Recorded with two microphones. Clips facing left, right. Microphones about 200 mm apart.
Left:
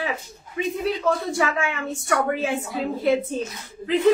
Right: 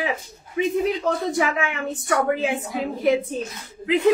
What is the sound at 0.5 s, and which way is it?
A woman's voice, 15° right (ahead or behind).